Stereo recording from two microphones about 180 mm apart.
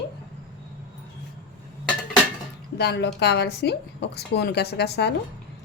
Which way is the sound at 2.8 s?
70° left (ahead or behind).